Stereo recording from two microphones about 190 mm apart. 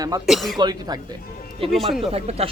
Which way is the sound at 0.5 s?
20° right (ahead or behind).